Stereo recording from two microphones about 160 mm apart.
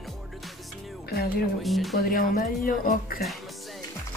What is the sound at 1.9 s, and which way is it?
A woman's voice, 65° left (ahead or behind).